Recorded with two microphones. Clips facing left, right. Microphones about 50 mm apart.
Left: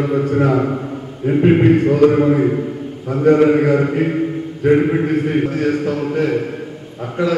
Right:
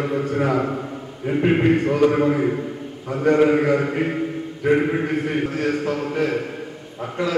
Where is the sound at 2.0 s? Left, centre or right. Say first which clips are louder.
Left 5 dB; centre.